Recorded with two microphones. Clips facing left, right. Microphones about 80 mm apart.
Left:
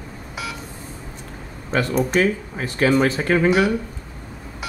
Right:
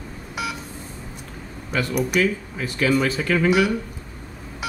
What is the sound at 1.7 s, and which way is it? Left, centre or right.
Speech, left.